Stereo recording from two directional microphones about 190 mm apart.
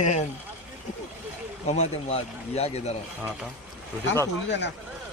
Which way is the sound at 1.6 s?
35° left (ahead or behind).